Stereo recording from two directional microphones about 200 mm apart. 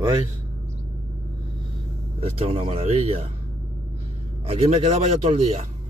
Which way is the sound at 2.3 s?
30° right (ahead or behind).